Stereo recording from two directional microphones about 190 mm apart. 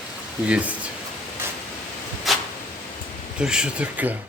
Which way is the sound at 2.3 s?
Centre (ahead or behind).